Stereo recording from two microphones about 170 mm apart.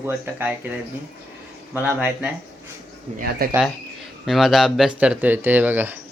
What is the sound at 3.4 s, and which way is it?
Speech, 65° right (ahead or behind).